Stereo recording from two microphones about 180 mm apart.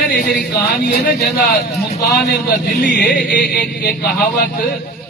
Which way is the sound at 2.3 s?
60° left (ahead or behind).